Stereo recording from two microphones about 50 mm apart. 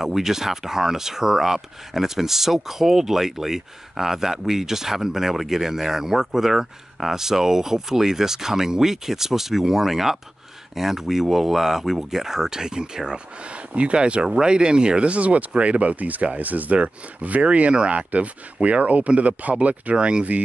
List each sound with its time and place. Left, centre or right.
0.0 s speech: centre; by 20.4 s right